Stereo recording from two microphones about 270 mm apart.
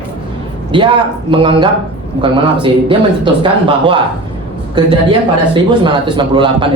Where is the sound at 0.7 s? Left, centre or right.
Centre.